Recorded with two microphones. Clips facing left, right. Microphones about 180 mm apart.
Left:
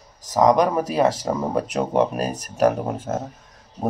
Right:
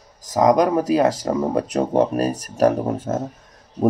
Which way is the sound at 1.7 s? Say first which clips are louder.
Right 2 dB; 40° right (ahead or behind).